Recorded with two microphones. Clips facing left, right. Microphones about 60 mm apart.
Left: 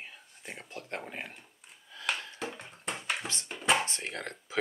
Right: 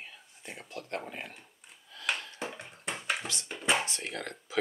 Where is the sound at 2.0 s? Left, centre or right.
Centre.